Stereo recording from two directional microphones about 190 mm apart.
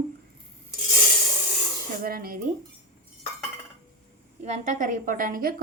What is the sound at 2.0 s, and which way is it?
Speech, 50° right (ahead or behind).